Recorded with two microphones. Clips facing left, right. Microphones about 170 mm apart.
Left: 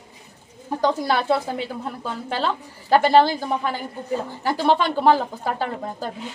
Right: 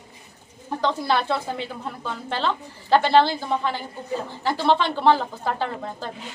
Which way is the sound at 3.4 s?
45° left (ahead or behind).